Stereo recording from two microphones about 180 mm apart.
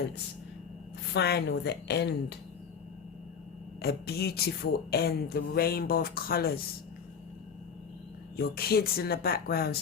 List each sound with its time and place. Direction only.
1.1 s a woman's voice: 65° left (ahead or behind)
3.8 s speech: 60° left (ahead or behind)
8.4 s speech: 60° left (ahead or behind)